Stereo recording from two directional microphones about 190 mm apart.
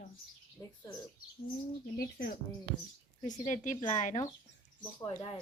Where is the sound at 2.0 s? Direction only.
50° left (ahead or behind).